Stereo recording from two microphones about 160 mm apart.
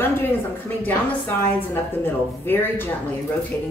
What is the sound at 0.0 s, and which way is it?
A woman's voice, 15° left (ahead or behind).